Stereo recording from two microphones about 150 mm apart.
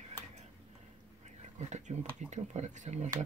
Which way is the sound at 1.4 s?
50° right (ahead or behind).